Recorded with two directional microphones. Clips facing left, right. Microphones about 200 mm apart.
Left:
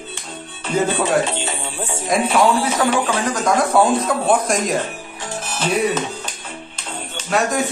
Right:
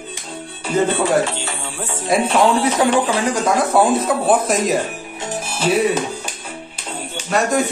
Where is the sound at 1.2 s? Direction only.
20° left (ahead or behind).